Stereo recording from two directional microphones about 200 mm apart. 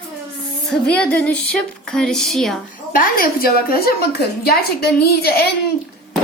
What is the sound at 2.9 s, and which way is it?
A woman's voice, 45° left (ahead or behind).